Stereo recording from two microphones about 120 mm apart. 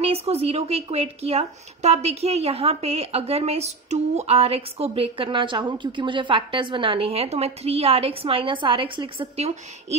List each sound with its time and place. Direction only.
0.0 s a woman's voice: 60° right (ahead or behind)